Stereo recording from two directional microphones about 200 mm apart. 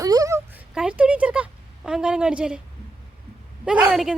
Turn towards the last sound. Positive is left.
turn(degrees=-5)  # may be behind; listen again after turning